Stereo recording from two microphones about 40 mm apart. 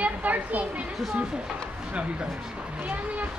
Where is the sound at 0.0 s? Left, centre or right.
Right.